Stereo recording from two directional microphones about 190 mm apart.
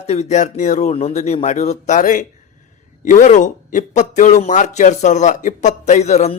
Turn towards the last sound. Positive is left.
turn(degrees=35)  # may be behind; listen again after turning